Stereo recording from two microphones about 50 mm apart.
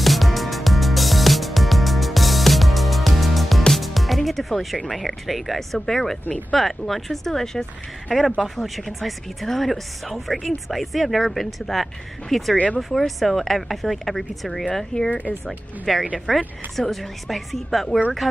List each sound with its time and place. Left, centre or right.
0.0 s music: centre
3.7 s a woman's voice: centre
15.0 s speech: left
15.4 s a woman's voice: centre